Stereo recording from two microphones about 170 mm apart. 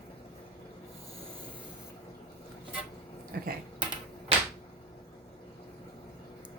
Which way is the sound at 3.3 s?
60° right (ahead or behind).